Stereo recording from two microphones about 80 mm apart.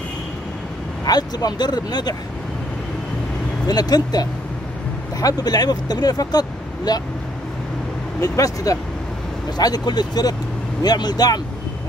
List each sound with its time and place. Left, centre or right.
1.0 s speech: left
3.6 s speech: left
8.2 s speech: left
9.6 s speech: left